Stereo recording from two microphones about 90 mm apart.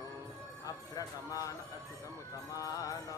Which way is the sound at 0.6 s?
40° left (ahead or behind).